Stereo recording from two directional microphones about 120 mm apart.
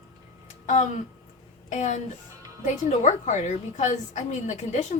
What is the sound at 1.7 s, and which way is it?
A woman's voice, 85° left.